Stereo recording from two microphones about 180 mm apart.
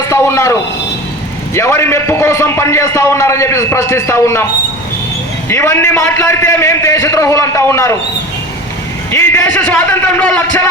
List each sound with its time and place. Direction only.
0.1 s a man's voice: 15° left (ahead or behind)
1.5 s a man's voice: 15° left (ahead or behind)
5.5 s a man's voice: 15° left (ahead or behind)
9.1 s a man's voice: 15° left (ahead or behind)